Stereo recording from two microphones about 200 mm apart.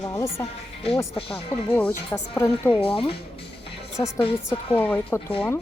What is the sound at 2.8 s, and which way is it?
Speech, 25° left (ahead or behind).